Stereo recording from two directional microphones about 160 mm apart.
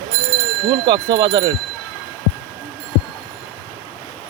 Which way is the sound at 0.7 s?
30° right (ahead or behind).